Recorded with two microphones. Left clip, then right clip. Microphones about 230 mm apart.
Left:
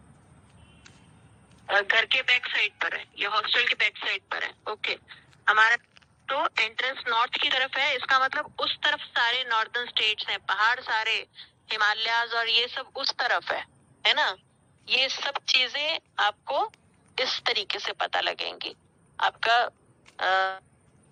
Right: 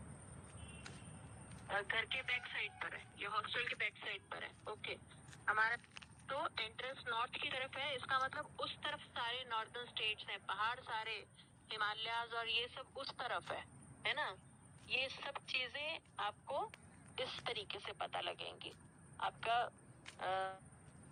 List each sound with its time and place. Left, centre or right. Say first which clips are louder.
1.6 s speech: left 17 dB; left